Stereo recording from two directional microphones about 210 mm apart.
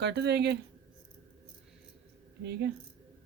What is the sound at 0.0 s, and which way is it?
Speech, 55° right (ahead or behind).